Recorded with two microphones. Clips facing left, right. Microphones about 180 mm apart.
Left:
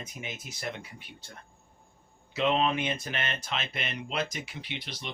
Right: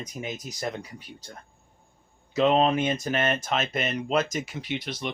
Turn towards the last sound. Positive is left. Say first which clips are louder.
# right 8 dB
turn(degrees=-45)  # may be behind; listen again after turning